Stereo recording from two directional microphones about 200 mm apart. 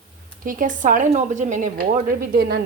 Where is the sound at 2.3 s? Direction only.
50° right (ahead or behind).